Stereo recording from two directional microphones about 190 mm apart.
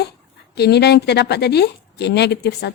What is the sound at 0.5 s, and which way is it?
A woman's voice, 60° left (ahead or behind).